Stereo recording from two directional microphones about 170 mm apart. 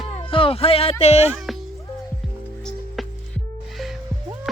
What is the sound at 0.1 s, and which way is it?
Speech, 35° left (ahead or behind).